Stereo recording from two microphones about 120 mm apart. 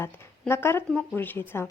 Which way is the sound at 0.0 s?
20° left (ahead or behind).